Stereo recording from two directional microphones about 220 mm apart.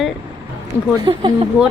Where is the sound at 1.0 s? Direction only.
20° right (ahead or behind).